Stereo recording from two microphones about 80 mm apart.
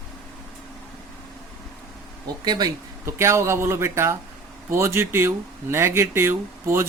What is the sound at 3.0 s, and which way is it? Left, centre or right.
Speech, right.